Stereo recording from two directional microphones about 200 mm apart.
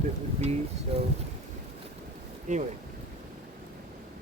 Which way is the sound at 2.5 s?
40° right (ahead or behind).